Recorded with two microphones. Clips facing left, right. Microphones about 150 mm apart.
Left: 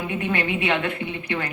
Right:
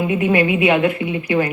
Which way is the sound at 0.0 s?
10° right (ahead or behind).